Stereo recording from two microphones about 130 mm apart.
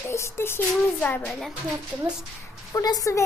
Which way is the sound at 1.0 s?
10° left (ahead or behind).